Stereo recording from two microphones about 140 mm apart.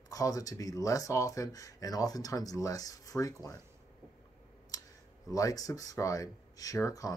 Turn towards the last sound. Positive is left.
turn(degrees=25)  # may be behind; listen again after turning